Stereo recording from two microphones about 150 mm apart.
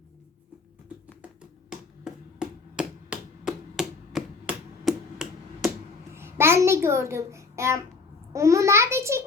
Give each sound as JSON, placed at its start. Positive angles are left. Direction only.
{"t": 1.2, "sound": "finger snapping", "side_deg": -5}
{"t": 6.1, "sound": "a child's voice", "side_deg": -15}